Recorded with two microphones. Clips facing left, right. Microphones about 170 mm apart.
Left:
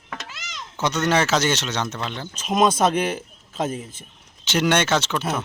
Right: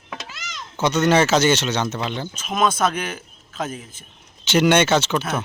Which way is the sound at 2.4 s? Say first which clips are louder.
Left 2 dB; 35° left (ahead or behind).